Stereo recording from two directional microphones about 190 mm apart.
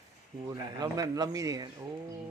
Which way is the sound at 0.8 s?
20° right (ahead or behind).